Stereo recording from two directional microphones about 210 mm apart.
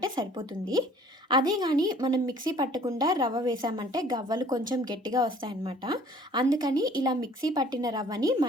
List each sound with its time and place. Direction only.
0.2 s a woman's voice: 20° right (ahead or behind)